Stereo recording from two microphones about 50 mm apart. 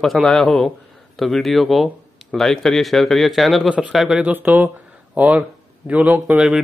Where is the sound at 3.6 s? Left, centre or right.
Right.